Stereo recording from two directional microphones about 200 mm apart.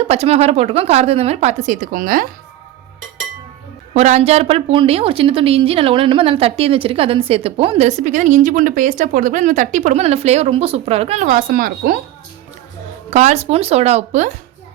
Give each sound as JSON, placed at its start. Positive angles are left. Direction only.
{"t": 0.0, "sound": "speech", "side_deg": -30}
{"t": 3.9, "sound": "a woman's voice", "side_deg": -35}
{"t": 11.3, "sound": "speech", "side_deg": -45}
{"t": 13.1, "sound": "speech", "side_deg": -35}